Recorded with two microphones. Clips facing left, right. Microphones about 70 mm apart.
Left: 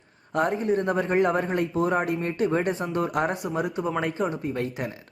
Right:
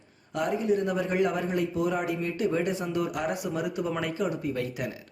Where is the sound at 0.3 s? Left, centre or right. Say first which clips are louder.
Left 3 dB; left.